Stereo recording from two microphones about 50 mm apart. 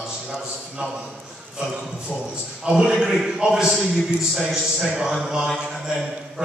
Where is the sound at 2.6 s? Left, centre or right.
Centre.